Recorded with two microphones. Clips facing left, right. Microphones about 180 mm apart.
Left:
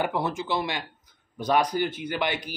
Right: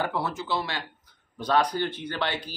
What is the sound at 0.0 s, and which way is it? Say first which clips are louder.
Speech: left 2 dB; 15° left (ahead or behind).